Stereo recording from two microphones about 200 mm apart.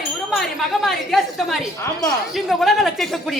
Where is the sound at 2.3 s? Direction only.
Centre (ahead or behind).